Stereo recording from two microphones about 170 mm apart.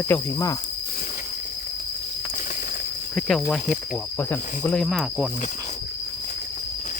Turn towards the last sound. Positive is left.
turn(degrees=-5)  # may be behind; listen again after turning